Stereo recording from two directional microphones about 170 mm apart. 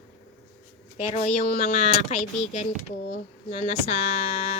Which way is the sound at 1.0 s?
40° left (ahead or behind).